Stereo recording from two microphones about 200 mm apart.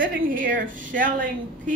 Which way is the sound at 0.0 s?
45° right (ahead or behind).